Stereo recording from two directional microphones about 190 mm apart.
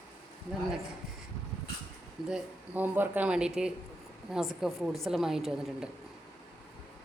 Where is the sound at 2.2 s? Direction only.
5° right (ahead or behind).